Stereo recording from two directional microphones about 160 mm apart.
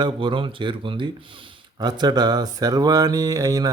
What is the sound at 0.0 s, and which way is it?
Speech, 30° right (ahead or behind).